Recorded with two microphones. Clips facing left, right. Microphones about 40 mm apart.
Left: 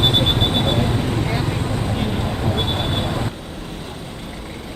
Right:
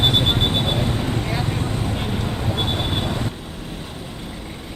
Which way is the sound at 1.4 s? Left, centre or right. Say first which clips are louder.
Left 2 dB; centre.